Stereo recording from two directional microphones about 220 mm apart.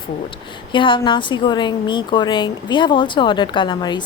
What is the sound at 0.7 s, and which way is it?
A woman's voice, 20° left (ahead or behind).